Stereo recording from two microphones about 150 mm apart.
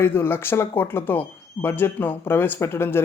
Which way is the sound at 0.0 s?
15° left (ahead or behind).